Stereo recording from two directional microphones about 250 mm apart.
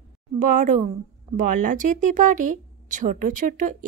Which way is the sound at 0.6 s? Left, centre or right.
Right.